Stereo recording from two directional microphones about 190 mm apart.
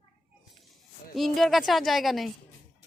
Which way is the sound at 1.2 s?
Centre (ahead or behind).